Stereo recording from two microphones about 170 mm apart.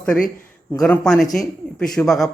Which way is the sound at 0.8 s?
5° left (ahead or behind).